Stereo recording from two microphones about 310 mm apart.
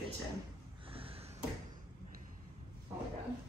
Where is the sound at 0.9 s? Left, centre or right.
Centre.